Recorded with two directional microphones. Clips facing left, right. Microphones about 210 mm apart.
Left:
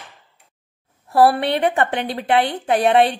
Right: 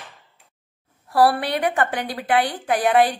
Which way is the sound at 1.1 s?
25° left (ahead or behind).